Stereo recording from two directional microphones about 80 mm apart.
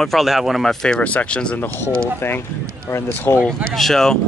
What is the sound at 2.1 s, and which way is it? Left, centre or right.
Speech, left.